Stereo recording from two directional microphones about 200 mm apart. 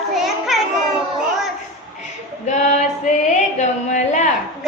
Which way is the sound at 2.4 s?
35° left (ahead or behind).